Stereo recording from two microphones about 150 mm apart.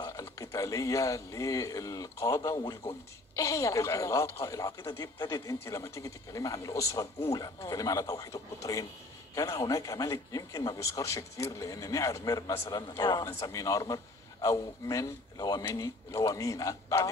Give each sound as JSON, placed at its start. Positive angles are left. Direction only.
{"t": 0.1, "sound": "speech", "side_deg": 20}